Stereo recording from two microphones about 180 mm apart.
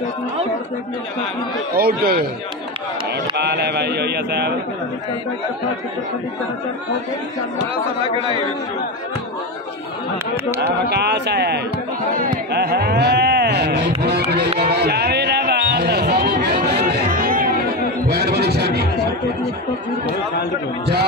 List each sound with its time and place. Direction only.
1.8 s speech: 60° right (ahead or behind)
3.3 s speech: 70° right (ahead or behind)
10.6 s speech: 65° right (ahead or behind)
12.2 s a sound: 60° right (ahead or behind)
16.9 s music: 55° right (ahead or behind)
18.0 s music: 65° right (ahead or behind)